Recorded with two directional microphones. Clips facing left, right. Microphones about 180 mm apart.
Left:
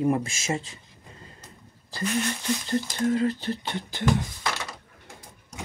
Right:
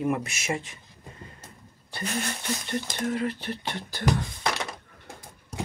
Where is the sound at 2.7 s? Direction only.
30° left (ahead or behind).